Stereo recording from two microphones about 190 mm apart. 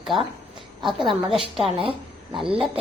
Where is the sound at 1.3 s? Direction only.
30° right (ahead or behind).